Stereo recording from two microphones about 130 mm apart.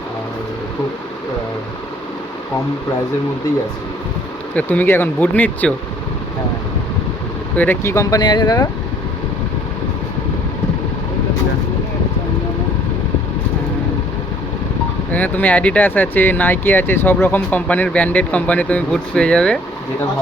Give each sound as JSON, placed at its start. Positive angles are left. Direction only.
{"t": 4.5, "sound": "speech", "side_deg": 15}
{"t": 7.5, "sound": "speech", "side_deg": 15}
{"t": 15.1, "sound": "speech", "side_deg": 15}